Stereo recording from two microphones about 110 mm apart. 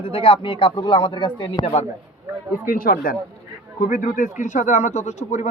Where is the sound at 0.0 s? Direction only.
55° left (ahead or behind).